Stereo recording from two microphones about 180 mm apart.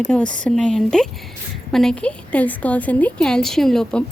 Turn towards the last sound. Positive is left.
turn(degrees=5)  # may be behind; listen again after turning